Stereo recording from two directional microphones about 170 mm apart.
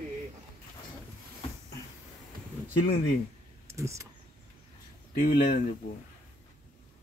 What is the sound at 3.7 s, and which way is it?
Speech, 15° right (ahead or behind).